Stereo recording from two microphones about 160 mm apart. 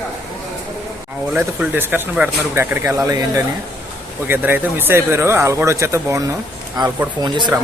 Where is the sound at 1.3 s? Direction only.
10° right (ahead or behind); by 7.5 s 30° right (ahead or behind).